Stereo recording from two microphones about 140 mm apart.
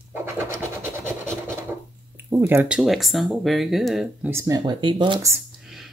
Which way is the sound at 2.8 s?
Centre (ahead or behind).